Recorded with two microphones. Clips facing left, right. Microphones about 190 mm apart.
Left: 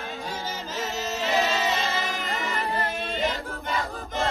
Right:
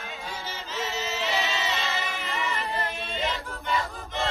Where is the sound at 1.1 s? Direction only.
40° left (ahead or behind).